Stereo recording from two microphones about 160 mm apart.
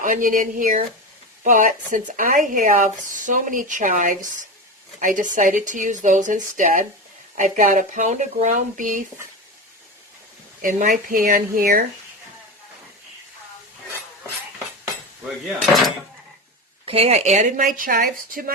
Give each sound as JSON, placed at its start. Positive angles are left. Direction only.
{"t": 0.0, "sound": "speech", "side_deg": -55}
{"t": 10.6, "sound": "speech", "side_deg": -55}
{"t": 16.8, "sound": "speech", "side_deg": -35}